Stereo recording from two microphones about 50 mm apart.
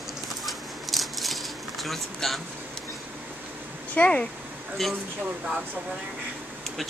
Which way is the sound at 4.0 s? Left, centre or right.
Left.